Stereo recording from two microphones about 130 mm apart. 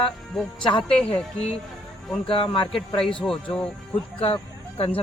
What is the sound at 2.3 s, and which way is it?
Speech, 45° left (ahead or behind).